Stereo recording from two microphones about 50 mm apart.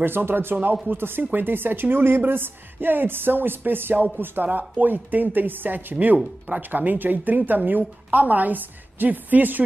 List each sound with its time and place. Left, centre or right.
0.0 s a woman's voice: right